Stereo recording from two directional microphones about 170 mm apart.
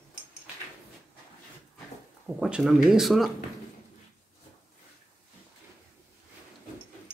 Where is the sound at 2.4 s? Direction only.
5° right (ahead or behind).